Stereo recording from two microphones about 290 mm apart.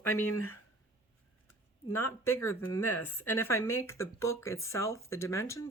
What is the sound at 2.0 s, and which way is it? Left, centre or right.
Speech, centre.